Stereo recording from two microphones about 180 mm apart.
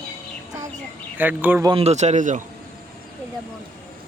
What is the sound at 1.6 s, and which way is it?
Speech, 35° right (ahead or behind).